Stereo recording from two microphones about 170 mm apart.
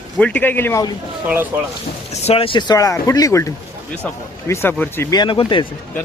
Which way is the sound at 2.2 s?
35° left (ahead or behind).